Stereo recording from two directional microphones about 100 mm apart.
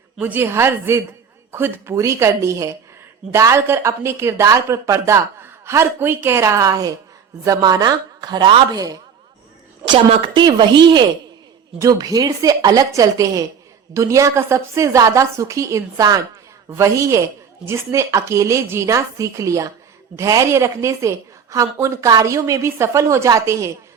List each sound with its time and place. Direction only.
0.2 s a woman's voice: 20° right (ahead or behind); by 9.0 s 40° right (ahead or behind)
10.3 s a woman's voice: 50° right (ahead or behind)
11.8 s a woman's voice: 35° right (ahead or behind)